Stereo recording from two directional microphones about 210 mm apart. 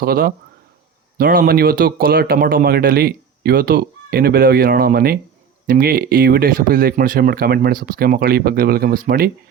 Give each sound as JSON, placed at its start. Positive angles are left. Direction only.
{"t": 0.0, "sound": "speech", "side_deg": -45}